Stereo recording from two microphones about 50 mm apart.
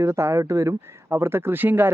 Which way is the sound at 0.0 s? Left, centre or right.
Right.